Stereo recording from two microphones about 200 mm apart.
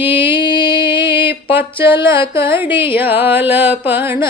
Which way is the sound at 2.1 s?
25° left (ahead or behind).